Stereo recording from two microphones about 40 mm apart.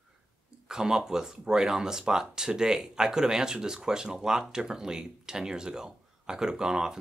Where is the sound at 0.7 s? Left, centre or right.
Centre.